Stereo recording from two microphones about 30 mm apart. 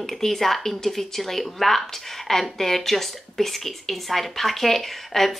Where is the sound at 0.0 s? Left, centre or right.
Centre.